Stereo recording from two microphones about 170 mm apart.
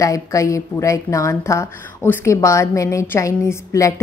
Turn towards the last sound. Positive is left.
turn(degrees=20)  # may be behind; listen again after turning